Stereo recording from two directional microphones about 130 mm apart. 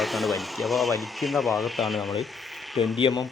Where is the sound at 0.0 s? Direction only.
Centre (ahead or behind).